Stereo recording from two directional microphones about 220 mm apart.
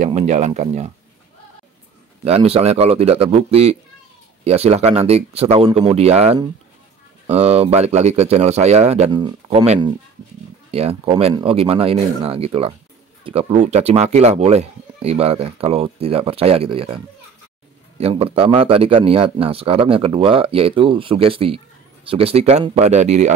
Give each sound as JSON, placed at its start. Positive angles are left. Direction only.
{"t": 0.0, "sound": "speech", "side_deg": -30}
{"t": 2.2, "sound": "speech", "side_deg": -25}